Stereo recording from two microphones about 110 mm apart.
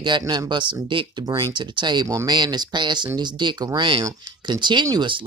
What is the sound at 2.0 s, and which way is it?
Speech, 30° right (ahead or behind).